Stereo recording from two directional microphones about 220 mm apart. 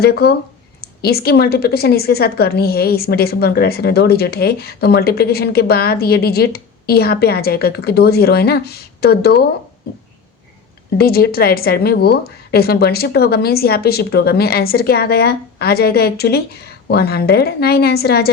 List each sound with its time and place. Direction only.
0.0 s a woman's voice: 45° left (ahead or behind)
10.9 s a woman's voice: 45° left (ahead or behind)